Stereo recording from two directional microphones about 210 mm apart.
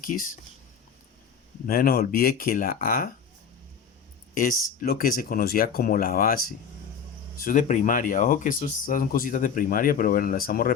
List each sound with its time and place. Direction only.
0.0 s speech: 40° left (ahead or behind)
1.6 s speech: 45° left (ahead or behind)
4.4 s speech: 40° left (ahead or behind)